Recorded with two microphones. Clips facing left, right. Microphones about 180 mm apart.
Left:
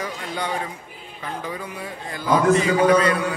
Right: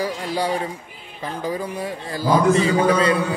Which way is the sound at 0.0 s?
35° right (ahead or behind).